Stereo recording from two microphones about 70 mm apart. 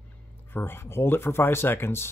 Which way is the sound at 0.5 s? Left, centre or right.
Left.